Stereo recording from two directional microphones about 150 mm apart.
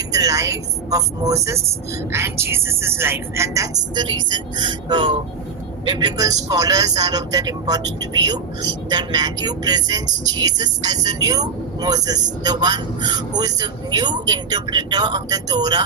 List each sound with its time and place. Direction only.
0.1 s speech: 25° right (ahead or behind)